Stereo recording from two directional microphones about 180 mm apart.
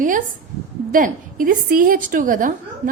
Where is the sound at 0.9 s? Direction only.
50° right (ahead or behind).